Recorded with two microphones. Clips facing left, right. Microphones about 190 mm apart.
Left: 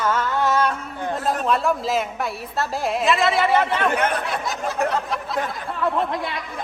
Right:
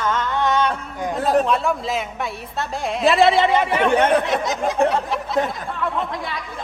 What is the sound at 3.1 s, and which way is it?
Speech, 30° right (ahead or behind).